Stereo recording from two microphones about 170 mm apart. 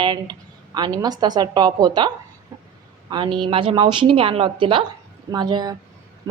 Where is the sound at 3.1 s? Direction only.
25° right (ahead or behind).